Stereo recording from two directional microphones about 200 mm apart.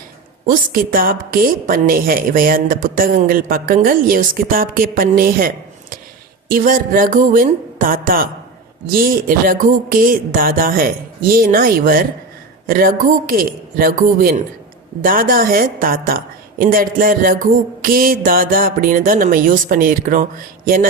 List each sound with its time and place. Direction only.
0.4 s a woman's voice: 45° right (ahead or behind)